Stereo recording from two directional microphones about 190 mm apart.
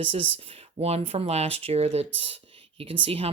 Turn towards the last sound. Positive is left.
turn(degrees=-30)  # may be behind; listen again after turning